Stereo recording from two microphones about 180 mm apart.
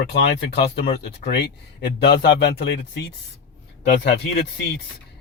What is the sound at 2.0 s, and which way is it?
Speech, 70° left (ahead or behind).